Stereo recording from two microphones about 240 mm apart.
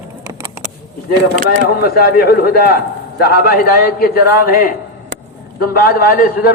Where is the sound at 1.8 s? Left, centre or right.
Left.